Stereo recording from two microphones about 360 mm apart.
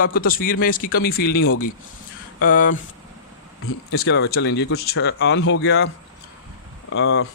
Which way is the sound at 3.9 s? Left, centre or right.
Left.